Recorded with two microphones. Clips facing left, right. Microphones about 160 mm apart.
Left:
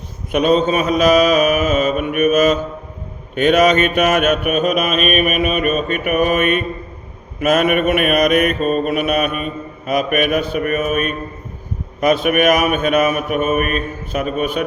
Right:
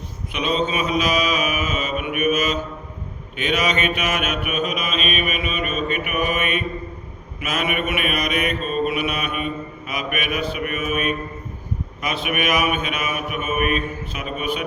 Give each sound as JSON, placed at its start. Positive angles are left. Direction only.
{"t": 0.3, "sound": "mantra", "side_deg": 50}